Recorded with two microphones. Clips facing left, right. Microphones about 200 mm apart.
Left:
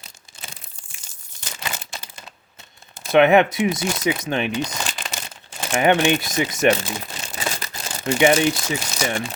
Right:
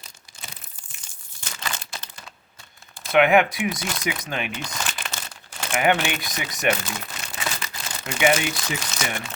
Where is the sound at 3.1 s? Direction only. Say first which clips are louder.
Left 3 dB; 25° left (ahead or behind).